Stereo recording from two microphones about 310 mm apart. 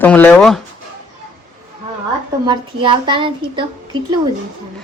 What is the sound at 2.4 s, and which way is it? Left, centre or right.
A woman's voice, centre.